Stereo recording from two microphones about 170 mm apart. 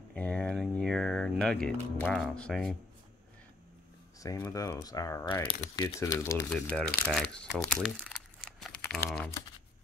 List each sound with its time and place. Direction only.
0.1 s speech: 5° left (ahead or behind)
4.2 s speech: 20° left (ahead or behind)
5.5 s speech: 30° left (ahead or behind)
5.9 s speech: 15° left (ahead or behind)
6.5 s speech: 5° left (ahead or behind)
7.8 s crumpling: centre (ahead or behind)
8.9 s speech: 5° left (ahead or behind)